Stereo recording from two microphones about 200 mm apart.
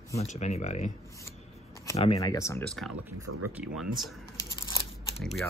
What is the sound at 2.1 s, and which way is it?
Speech, 15° left (ahead or behind).